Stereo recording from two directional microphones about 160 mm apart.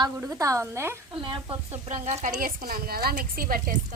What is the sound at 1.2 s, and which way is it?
Speech, 30° right (ahead or behind).